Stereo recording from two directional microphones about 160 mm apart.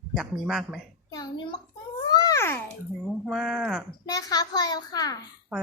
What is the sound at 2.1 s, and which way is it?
Cat, 20° left (ahead or behind).